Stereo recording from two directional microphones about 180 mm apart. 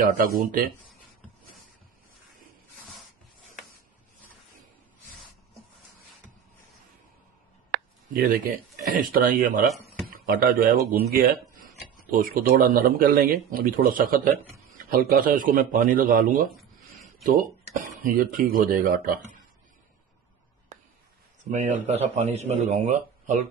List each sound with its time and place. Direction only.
0.0 s speech: 50° right (ahead or behind)
7.7 s speech: 55° right (ahead or behind)
21.5 s speech: 40° right (ahead or behind)